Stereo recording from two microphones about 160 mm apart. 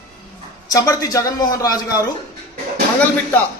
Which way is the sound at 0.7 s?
20° left (ahead or behind).